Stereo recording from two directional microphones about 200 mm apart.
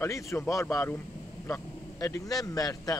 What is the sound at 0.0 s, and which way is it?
A man's voice, 15° left (ahead or behind).